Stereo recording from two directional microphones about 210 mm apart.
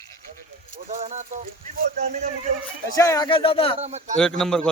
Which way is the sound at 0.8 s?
35° right (ahead or behind).